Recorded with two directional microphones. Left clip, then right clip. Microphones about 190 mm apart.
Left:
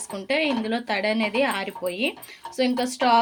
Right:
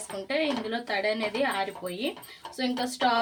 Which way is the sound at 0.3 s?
50° left (ahead or behind).